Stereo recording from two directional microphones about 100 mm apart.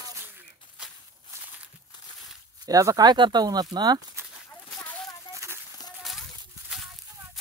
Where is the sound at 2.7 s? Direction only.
35° right (ahead or behind).